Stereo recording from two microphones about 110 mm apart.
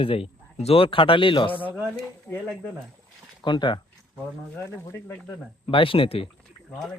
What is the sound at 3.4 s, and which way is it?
Speech, 45° left (ahead or behind).